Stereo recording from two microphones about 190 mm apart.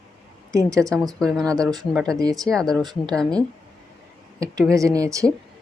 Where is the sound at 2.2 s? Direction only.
20° right (ahead or behind).